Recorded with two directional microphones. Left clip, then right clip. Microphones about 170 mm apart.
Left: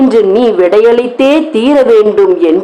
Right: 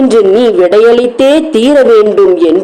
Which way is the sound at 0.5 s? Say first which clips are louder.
Right 1 dB; 25° right (ahead or behind).